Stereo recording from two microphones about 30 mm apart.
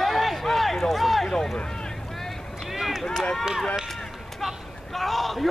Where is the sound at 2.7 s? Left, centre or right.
Centre.